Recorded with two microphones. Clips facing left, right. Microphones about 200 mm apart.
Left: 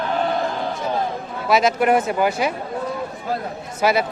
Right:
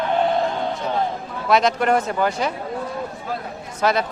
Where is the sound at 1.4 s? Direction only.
5° left (ahead or behind).